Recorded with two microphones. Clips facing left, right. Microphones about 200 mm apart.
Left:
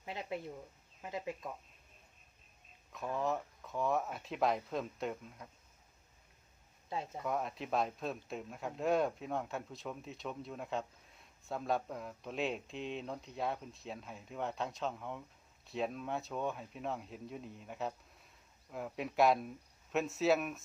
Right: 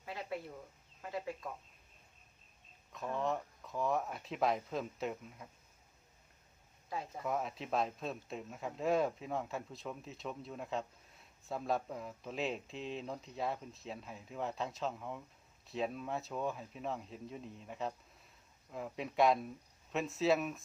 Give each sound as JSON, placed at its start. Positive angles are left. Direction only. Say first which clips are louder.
{"t": 0.0, "sound": "a sound", "louder": "left 1 dB", "side_deg": 20}
{"t": 1.0, "sound": "speech", "louder": "even", "side_deg": 20}
{"t": 2.9, "sound": "speech", "louder": "left 1 dB", "side_deg": 0}
{"t": 7.3, "sound": "speech", "louder": "even", "side_deg": 0}